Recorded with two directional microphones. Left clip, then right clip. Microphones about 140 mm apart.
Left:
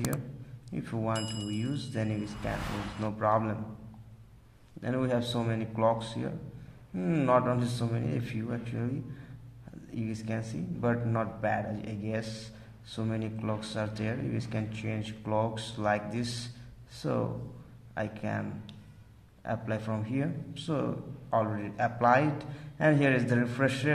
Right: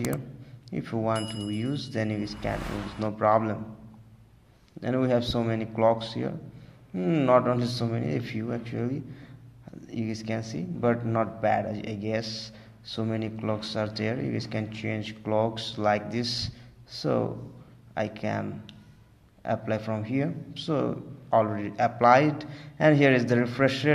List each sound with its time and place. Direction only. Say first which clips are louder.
0.7 s speech: right 5 dB; 30° right (ahead or behind)
4.7 s speech: right 5 dB; 25° right (ahead or behind)